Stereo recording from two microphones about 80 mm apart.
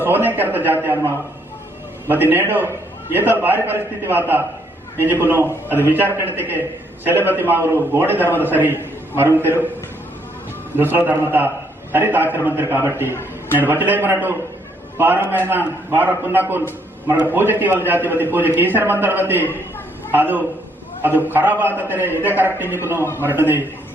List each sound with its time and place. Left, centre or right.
0.0 s a man's voice: right
10.8 s a man's voice: right